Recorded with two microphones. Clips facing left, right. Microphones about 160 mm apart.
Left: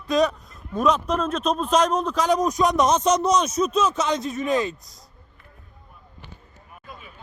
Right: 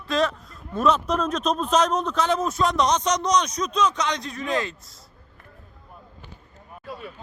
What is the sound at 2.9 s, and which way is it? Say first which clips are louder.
A man's voice: left 3 dB; 10° left (ahead or behind).